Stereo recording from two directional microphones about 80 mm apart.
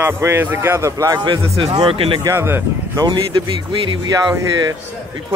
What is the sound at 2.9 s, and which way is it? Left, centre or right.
Speech, right.